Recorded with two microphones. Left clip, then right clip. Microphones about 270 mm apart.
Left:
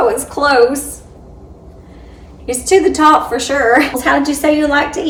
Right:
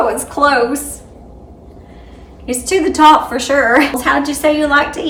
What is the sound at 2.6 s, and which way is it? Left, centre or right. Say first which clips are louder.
A woman's voice: right 1 dB; centre.